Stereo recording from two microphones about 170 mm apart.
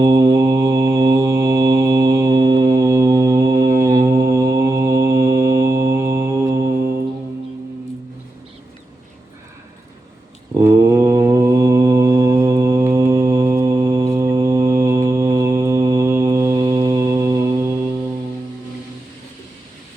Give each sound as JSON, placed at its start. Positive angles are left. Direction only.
{"t": 0.0, "sound": "mantra", "side_deg": -25}
{"t": 10.6, "sound": "mantra", "side_deg": -15}